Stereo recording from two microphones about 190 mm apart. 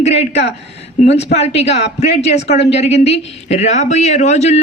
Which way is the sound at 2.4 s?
65° left (ahead or behind).